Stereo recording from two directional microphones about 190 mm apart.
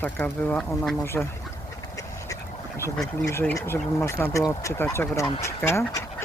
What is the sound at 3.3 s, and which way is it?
Speech, 15° left (ahead or behind).